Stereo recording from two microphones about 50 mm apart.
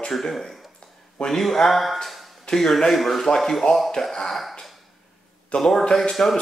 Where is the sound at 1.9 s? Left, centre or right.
Centre.